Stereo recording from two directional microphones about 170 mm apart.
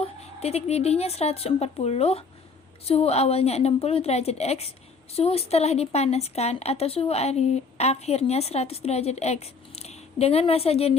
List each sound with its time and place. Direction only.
0.0 s speech: 40° left (ahead or behind)